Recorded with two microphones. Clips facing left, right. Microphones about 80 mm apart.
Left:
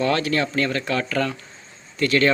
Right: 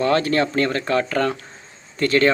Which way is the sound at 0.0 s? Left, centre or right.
Right.